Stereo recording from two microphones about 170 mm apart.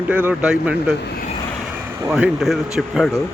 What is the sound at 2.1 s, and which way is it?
Speech, 5° right (ahead or behind).